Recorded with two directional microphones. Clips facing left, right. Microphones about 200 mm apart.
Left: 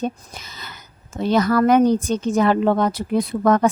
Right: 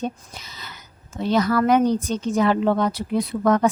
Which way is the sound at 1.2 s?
50° left (ahead or behind).